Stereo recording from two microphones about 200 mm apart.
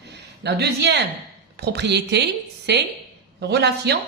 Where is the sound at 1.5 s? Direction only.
55° right (ahead or behind).